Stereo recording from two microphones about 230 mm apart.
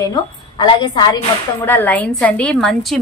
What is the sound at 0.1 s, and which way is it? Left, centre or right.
Speech, centre.